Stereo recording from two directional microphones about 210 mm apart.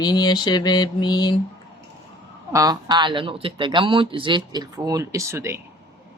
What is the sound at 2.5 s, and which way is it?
A man's voice, 20° right (ahead or behind).